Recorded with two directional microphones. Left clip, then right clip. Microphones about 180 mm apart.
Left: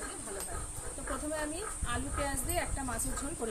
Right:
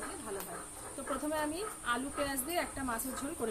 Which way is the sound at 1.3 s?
25° right (ahead or behind).